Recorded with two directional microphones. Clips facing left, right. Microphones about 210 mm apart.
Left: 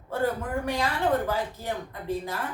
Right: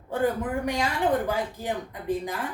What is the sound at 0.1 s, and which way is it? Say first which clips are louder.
Speech: right 2 dB; 15° right (ahead or behind).